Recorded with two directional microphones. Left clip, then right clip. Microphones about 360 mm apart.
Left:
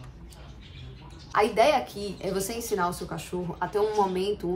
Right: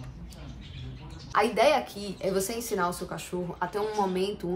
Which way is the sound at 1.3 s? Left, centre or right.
Centre.